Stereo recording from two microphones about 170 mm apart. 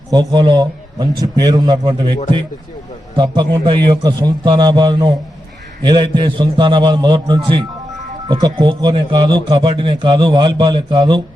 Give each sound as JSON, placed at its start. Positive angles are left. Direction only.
{"t": 0.1, "sound": "a man's voice", "side_deg": -20}
{"t": 3.2, "sound": "a man's voice", "side_deg": -25}